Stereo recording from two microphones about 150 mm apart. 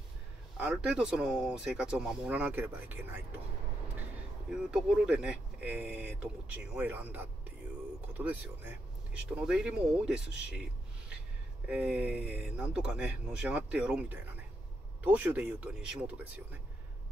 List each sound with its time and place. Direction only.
0.6 s speech: 5° right (ahead or behind)
4.5 s speech: 5° right (ahead or behind)
11.6 s speech: 5° right (ahead or behind)